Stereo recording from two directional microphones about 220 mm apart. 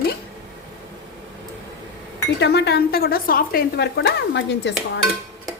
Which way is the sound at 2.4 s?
50° left (ahead or behind).